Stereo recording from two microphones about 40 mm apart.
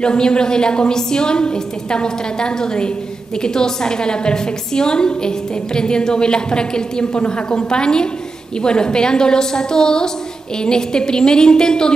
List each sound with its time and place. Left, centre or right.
0.0 s a woman's voice: left